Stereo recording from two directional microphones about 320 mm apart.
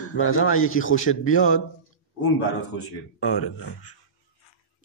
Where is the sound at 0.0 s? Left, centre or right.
Left.